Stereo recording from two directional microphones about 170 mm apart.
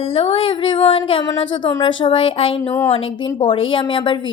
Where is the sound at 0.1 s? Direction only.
35° left (ahead or behind).